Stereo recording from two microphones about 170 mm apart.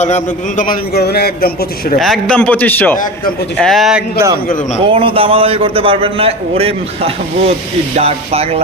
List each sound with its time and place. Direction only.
0.0 s a man's voice: 45° left (ahead or behind)
0.9 s a man's voice: 70° left (ahead or behind)
2.0 s a man's voice: 5° left (ahead or behind)
4.8 s a man's voice: 30° right (ahead or behind)